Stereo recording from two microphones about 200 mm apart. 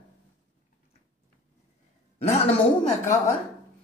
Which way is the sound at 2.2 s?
35° left (ahead or behind).